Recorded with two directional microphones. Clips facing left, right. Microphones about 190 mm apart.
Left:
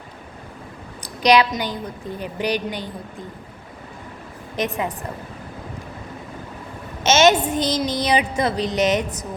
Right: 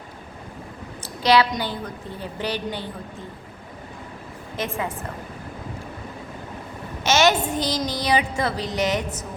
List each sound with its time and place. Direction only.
1.0 s a woman's voice: 15° left (ahead or behind)
4.5 s a woman's voice: 20° left (ahead or behind)
7.0 s a woman's voice: 20° left (ahead or behind)